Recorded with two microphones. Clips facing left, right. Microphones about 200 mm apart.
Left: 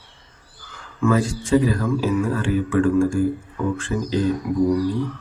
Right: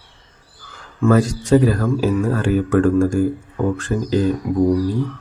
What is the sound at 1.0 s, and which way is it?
Speech, 40° right (ahead or behind).